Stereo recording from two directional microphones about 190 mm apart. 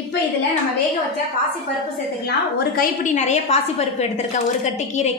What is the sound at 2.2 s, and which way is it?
Speech, 60° left (ahead or behind).